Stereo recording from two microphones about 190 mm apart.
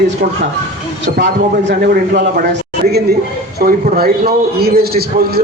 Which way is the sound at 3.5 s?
55° right (ahead or behind).